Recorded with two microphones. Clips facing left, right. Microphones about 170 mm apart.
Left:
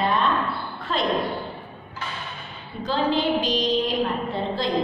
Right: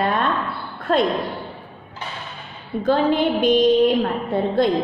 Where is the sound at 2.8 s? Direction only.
55° right (ahead or behind).